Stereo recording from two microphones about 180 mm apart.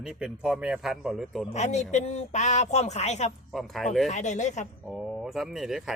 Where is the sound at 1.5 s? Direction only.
40° left (ahead or behind).